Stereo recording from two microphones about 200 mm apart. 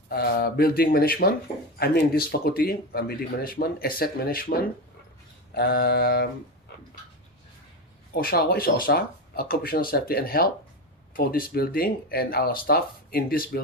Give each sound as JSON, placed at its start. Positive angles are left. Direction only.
{"t": 0.1, "sound": "speech", "side_deg": 50}
{"t": 8.1, "sound": "speech", "side_deg": 50}